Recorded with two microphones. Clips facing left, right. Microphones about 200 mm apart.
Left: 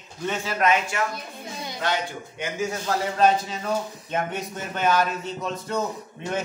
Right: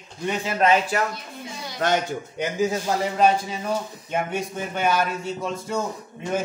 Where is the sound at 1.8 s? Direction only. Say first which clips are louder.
Right 5 dB; 45° right (ahead or behind).